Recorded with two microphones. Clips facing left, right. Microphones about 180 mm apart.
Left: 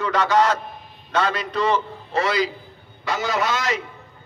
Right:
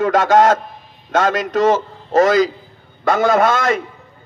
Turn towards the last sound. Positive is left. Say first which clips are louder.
# right 8 dB
turn(degrees=-50)  # may be behind; listen again after turning